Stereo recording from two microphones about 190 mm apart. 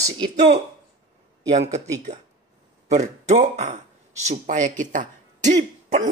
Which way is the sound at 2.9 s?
35° right (ahead or behind).